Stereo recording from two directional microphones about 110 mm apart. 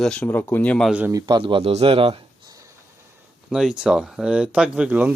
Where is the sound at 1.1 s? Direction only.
35° right (ahead or behind); by 2.2 s 60° right (ahead or behind).